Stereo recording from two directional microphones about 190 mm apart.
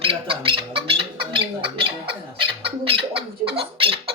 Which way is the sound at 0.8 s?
30° right (ahead or behind).